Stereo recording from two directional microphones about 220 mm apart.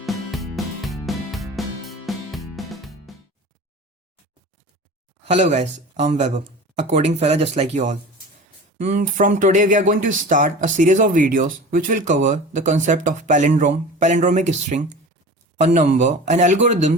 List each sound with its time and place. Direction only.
0.0 s music: centre (ahead or behind)
5.2 s speech: 30° right (ahead or behind)